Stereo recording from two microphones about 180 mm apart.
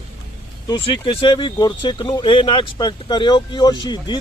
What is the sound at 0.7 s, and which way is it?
Speech, 25° left (ahead or behind).